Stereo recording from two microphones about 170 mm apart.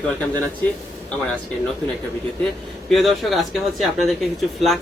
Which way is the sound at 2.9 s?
Centre (ahead or behind).